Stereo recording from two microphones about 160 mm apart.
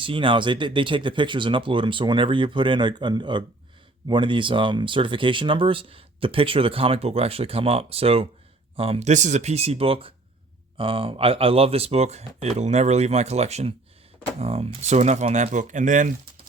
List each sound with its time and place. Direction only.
0.0 s speech: 35° right (ahead or behind); by 16.1 s 55° right (ahead or behind)